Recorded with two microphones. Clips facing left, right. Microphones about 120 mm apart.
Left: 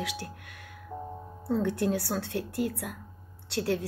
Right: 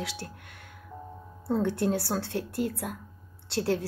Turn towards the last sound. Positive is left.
turn(degrees=-30)  # may be behind; listen again after turning